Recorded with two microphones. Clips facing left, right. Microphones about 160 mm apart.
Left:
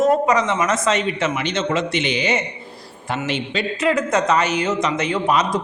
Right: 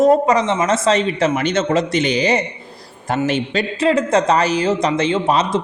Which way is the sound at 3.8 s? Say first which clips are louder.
Right 3 dB; 30° right (ahead or behind).